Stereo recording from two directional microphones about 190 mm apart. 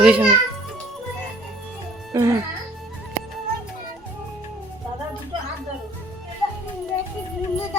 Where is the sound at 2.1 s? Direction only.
15° right (ahead or behind).